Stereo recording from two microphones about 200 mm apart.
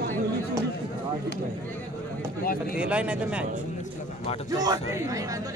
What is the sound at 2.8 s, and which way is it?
Speech, 5° right (ahead or behind).